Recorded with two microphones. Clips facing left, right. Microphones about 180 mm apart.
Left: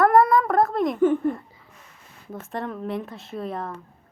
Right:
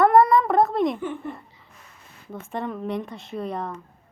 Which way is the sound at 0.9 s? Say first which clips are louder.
Left 11 dB; 45° left (ahead or behind).